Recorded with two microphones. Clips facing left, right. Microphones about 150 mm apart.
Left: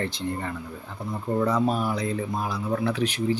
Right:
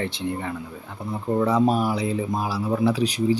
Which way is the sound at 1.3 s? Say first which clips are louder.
Right 4 dB; 5° right (ahead or behind).